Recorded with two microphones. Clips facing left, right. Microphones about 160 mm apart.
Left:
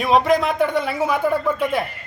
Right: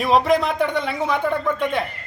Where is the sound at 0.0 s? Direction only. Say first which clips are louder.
Left 1 dB; centre (ahead or behind).